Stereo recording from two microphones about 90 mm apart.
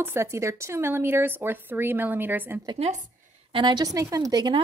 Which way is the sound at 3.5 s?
75° right (ahead or behind).